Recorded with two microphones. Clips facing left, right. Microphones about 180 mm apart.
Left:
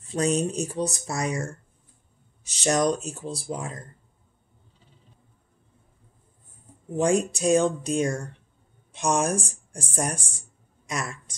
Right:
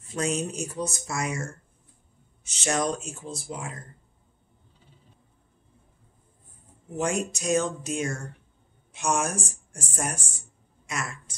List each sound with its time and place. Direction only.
0.1 s speech: 35° left (ahead or behind)
7.0 s speech: 35° left (ahead or behind)